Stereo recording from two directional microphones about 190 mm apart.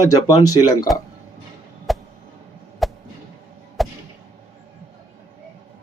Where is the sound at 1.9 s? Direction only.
Centre (ahead or behind).